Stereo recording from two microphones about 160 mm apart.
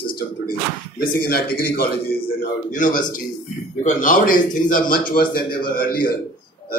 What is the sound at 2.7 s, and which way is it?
A man's voice, 55° left (ahead or behind).